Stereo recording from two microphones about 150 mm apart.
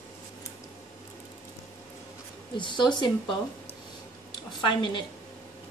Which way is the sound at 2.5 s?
30° left (ahead or behind).